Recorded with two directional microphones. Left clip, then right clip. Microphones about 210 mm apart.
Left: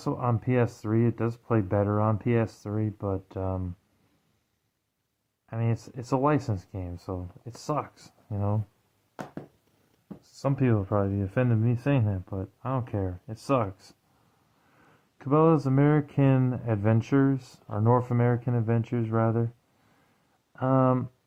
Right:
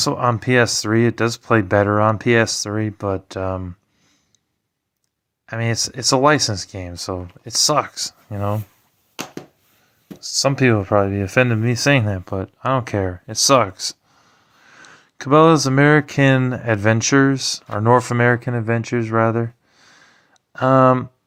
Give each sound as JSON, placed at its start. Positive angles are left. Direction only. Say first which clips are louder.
{"t": 0.0, "sound": "speech", "louder": "right 12 dB", "side_deg": -20}
{"t": 5.5, "sound": "speech", "louder": "right 12 dB", "side_deg": -20}
{"t": 10.4, "sound": "speech", "louder": "right 10 dB", "side_deg": -15}
{"t": 14.8, "sound": "a sound", "louder": "right 17 dB", "side_deg": -30}
{"t": 15.2, "sound": "speech", "louder": "right 10 dB", "side_deg": -20}
{"t": 20.5, "sound": "speech", "louder": "right 11 dB", "side_deg": -25}